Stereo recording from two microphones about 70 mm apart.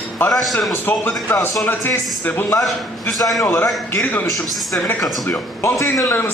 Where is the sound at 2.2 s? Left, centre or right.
Left.